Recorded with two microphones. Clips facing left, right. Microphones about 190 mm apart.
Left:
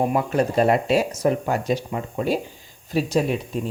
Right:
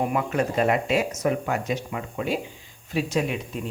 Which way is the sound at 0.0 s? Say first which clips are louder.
Left 3 dB; 30° left (ahead or behind).